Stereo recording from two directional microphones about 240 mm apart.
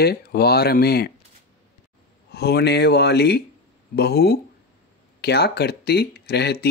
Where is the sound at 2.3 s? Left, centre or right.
Left.